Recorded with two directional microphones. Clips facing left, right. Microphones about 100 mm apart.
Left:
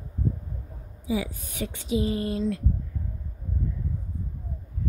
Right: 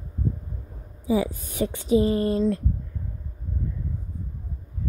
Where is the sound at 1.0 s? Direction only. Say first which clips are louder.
Right 5 dB; 35° right (ahead or behind).